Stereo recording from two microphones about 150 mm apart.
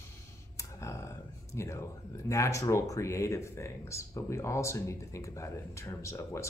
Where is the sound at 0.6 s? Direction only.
20° left (ahead or behind).